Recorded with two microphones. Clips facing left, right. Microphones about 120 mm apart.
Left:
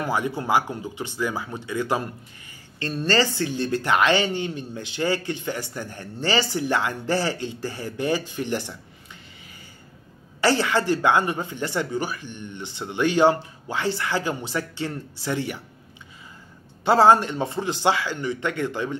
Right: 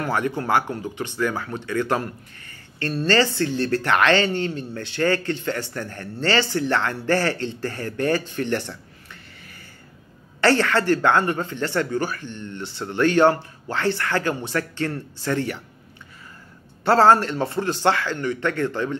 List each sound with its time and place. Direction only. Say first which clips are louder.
0.0 s a woman's voice: right 1 dB; 10° left (ahead or behind)
10.4 s a woman's voice: right 2 dB; 15° left (ahead or behind)
16.8 s a woman's voice: right 1 dB; 15° left (ahead or behind)